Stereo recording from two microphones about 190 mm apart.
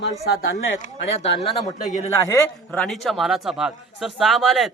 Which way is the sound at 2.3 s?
15° left (ahead or behind).